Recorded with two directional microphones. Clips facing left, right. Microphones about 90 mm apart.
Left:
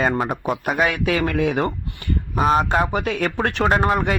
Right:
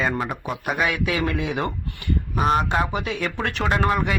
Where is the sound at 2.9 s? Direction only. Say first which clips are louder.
Left 4 dB; 45° left (ahead or behind).